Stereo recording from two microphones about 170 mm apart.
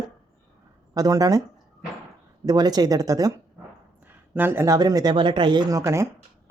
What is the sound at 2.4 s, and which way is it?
Speech, 20° right (ahead or behind).